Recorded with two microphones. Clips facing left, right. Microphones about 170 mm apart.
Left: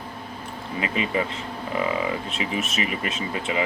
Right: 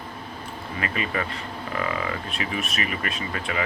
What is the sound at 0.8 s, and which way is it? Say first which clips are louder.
Speech: left 3 dB; 20° left (ahead or behind).